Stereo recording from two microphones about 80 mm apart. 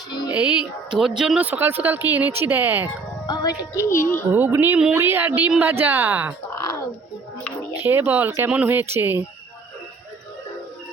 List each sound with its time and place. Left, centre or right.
0.3 s speech: centre
1.4 s speech: right
3.2 s music: left
3.8 s speech: left
4.3 s speech: right
6.6 s a sound: left
7.8 s speech: right